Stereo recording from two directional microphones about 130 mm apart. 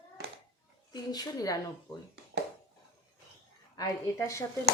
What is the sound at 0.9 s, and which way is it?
Speech, 30° left (ahead or behind).